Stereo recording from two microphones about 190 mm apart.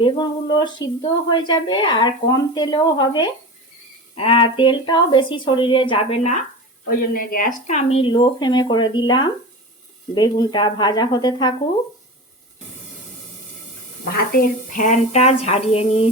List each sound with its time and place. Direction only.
0.0 s speech: 25° left (ahead or behind)
6.8 s speech: 50° left (ahead or behind); by 11.5 s 20° left (ahead or behind)
14.2 s a woman's voice: 50° left (ahead or behind); by 16.0 s 30° left (ahead or behind)